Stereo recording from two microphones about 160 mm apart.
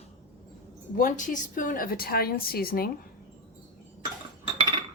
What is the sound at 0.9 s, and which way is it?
A woman's voice, 55° left (ahead or behind).